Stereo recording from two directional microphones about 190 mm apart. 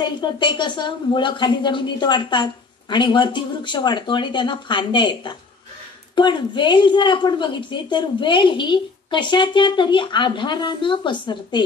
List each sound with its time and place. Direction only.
0.0 s a woman's voice: 25° left (ahead or behind)